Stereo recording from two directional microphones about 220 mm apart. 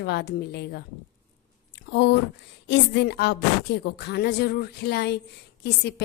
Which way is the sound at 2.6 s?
50° left (ahead or behind).